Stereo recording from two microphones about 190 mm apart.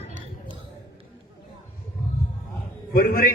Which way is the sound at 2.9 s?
50° left (ahead or behind).